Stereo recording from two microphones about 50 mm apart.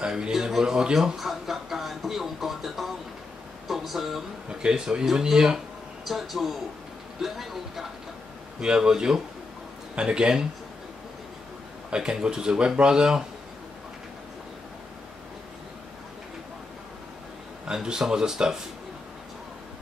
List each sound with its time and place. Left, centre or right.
0.0 s music: centre
3.6 s a sound: centre
4.5 s speech: centre
8.5 s speech: centre
11.9 s speech: centre
17.6 s speech: centre